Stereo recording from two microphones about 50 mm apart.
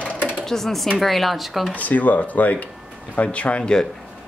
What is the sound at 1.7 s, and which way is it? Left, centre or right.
Speech, left.